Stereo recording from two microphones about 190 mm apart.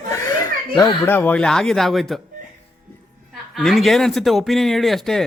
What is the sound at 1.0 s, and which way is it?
Speech, 10° left (ahead or behind).